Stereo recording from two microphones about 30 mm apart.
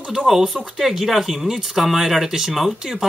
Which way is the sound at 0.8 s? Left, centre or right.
Centre.